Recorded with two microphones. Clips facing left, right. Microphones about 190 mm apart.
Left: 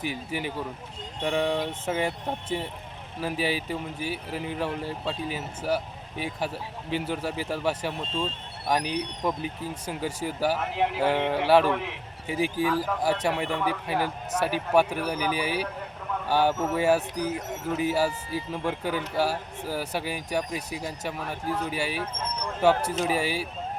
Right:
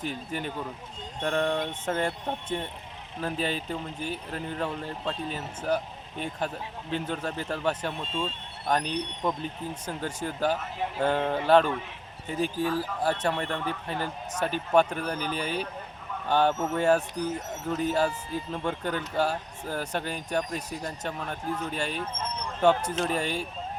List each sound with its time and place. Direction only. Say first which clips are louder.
0.0 s speech: left 2 dB; 10° left (ahead or behind)
10.6 s speech: left 6 dB; 70° left (ahead or behind)
10.9 s speech: right 2 dB; 5° left (ahead or behind)
11.7 s speech: left 5 dB; 75° left (ahead or behind)
12.3 s speech: left 2 dB; 10° left (ahead or behind)
21.4 s speech: left 3 dB; 35° left (ahead or behind)
21.7 s speech: left 2 dB; 5° left (ahead or behind)